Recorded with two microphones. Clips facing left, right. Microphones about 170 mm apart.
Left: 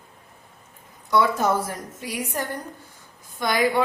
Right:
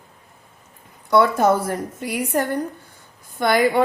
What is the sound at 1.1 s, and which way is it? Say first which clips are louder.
A woman's voice: right 5 dB; 60° right (ahead or behind).